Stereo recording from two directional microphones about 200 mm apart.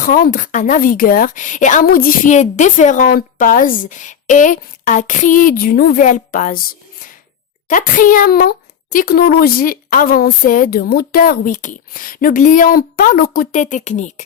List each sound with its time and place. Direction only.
0.0 s a woman's voice: 45° left (ahead or behind)
7.7 s a woman's voice: 40° left (ahead or behind)